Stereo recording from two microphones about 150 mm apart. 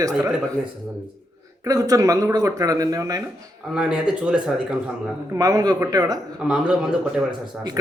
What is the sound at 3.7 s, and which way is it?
Speech, 5° right (ahead or behind).